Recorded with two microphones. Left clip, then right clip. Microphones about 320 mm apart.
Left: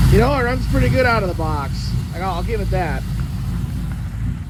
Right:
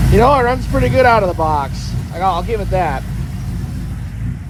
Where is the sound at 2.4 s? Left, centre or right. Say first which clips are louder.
Right 6 dB; right.